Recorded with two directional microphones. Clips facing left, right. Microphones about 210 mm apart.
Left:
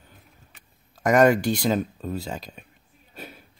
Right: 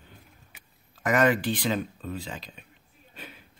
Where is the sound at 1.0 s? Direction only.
45° left (ahead or behind).